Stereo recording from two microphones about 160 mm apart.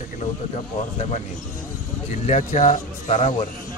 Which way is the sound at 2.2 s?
50° left (ahead or behind).